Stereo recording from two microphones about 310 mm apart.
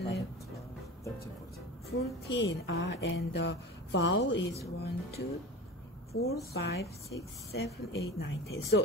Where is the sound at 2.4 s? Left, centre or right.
Left.